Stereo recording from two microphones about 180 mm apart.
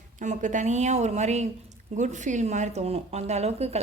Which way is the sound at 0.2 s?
45° right (ahead or behind).